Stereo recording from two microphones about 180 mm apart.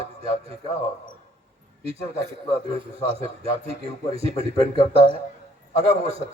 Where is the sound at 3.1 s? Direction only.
35° right (ahead or behind).